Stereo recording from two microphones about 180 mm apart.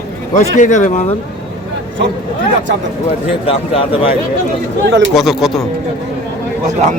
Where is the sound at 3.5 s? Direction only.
30° left (ahead or behind).